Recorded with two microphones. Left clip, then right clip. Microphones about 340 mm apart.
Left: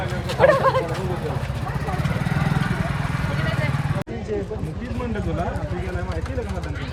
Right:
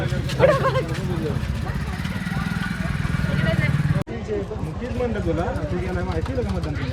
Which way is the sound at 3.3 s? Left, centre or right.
Left.